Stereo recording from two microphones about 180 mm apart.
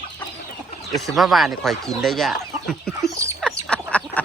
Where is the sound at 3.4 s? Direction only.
5° left (ahead or behind).